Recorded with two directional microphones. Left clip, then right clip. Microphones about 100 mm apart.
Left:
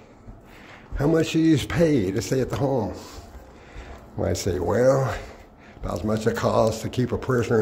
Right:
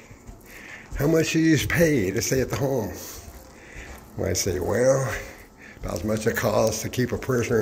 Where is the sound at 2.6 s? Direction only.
70° left (ahead or behind).